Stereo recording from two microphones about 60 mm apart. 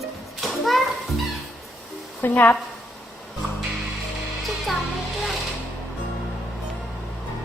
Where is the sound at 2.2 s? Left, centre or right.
Left.